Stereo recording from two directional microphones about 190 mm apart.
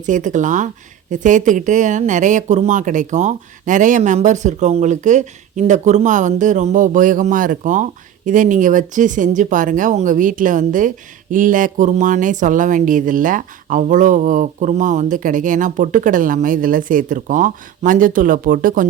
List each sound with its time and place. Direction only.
0.0 s speech: 40° right (ahead or behind)